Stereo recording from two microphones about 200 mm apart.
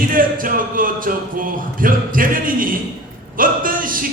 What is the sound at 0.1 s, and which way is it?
Music, 45° right (ahead or behind).